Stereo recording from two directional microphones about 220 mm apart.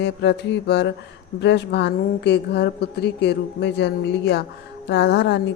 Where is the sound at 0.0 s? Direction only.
50° left (ahead or behind).